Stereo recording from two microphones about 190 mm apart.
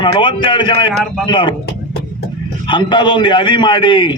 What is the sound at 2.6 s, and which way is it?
Speech, 25° left (ahead or behind).